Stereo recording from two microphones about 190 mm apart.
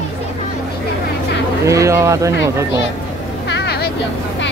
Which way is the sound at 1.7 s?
15° right (ahead or behind).